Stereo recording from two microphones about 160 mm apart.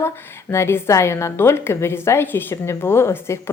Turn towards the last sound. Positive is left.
turn(degrees=15)  # may be behind; listen again after turning